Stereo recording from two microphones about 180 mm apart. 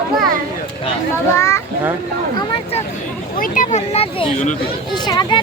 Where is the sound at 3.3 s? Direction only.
50° left (ahead or behind).